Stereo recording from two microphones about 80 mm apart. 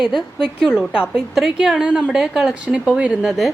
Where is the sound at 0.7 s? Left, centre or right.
Centre.